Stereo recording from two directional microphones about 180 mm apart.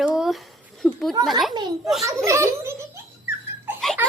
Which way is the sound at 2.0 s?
15° right (ahead or behind).